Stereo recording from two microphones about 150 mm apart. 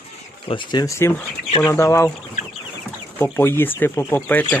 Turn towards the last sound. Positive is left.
turn(degrees=10)  # may be behind; listen again after turning